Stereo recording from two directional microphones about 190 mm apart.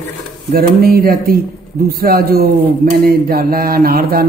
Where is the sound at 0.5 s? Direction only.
55° right (ahead or behind).